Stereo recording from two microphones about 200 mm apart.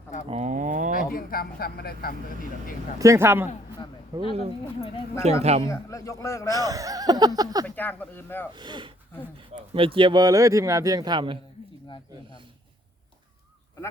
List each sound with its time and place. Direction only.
0.3 s a sound: 35° right (ahead or behind)
0.9 s speech: 45° left (ahead or behind)
3.0 s speech: 15° right (ahead or behind)
4.8 s speech: 20° left (ahead or behind)
5.2 s speech: 30° right (ahead or behind)
5.6 s a man's voice: 15° left (ahead or behind)
6.5 s speech: 20° right (ahead or behind)
7.8 s a man's voice: 10° left (ahead or behind)
8.5 s speech: 20° right (ahead or behind)